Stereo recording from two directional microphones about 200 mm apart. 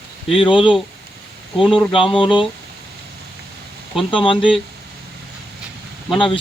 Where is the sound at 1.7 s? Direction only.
25° left (ahead or behind).